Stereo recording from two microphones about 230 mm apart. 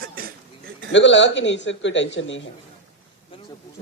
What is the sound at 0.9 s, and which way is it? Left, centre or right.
A man's voice, left.